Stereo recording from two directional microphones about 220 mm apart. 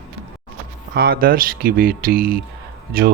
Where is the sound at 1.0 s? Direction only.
45° right (ahead or behind).